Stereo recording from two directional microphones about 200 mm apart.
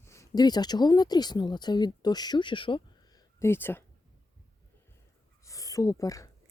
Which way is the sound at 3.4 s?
10° left (ahead or behind).